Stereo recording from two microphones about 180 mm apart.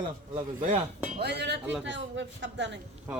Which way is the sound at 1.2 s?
70° right (ahead or behind).